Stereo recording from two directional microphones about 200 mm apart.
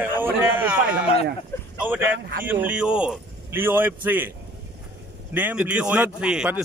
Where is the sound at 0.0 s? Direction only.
10° right (ahead or behind).